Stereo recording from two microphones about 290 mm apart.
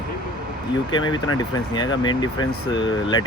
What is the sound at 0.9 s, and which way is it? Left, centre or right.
Speech, centre.